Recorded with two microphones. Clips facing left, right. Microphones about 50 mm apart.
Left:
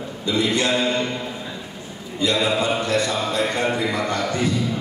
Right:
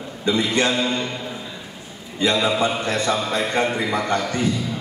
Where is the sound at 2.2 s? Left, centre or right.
Right.